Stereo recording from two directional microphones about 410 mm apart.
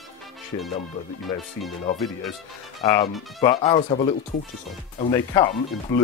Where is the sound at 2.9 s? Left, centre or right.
Centre.